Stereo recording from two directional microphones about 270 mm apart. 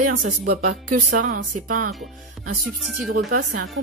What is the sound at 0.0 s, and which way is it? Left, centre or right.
Speech, right.